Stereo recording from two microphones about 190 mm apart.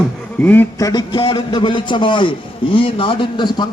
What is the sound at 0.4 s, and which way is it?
A man's voice, 10° left (ahead or behind).